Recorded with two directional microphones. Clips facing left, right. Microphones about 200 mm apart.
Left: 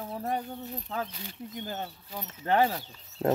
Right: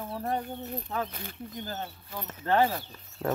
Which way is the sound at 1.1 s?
55° right (ahead or behind).